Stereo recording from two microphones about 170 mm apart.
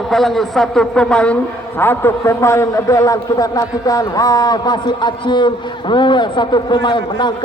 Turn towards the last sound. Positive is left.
turn(degrees=25)  # may be behind; listen again after turning